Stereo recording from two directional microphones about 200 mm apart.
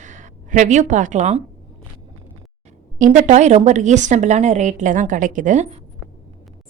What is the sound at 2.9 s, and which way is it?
Speech, 40° right (ahead or behind).